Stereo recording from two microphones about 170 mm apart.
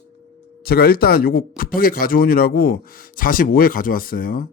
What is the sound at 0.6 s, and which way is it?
Speech, 65° left (ahead or behind).